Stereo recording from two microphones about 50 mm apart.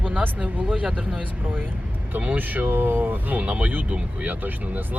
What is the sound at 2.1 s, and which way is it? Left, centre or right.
Speech, right.